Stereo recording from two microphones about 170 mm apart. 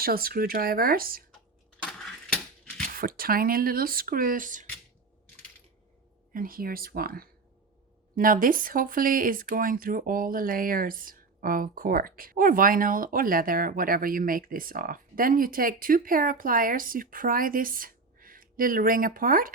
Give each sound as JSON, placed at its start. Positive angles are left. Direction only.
{"t": 0.0, "sound": "speech", "side_deg": -60}
{"t": 1.8, "sound": "mechanisms", "side_deg": 5}
{"t": 2.9, "sound": "speech", "side_deg": -60}
{"t": 6.3, "sound": "speech", "side_deg": -55}